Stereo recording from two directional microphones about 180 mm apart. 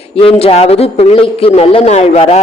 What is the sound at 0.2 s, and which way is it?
A man's voice, 30° left (ahead or behind).